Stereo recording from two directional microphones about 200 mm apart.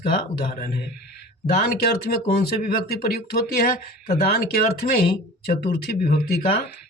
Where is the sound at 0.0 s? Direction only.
50° left (ahead or behind).